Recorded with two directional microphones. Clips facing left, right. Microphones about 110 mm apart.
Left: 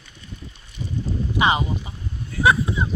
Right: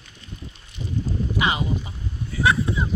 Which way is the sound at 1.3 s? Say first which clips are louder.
Left 4 dB; 25° left (ahead or behind).